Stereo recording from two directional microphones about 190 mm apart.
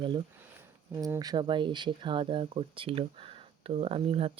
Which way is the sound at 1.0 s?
20° right (ahead or behind).